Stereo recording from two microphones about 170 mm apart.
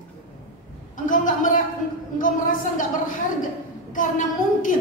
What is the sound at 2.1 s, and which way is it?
A woman's voice, 50° left (ahead or behind).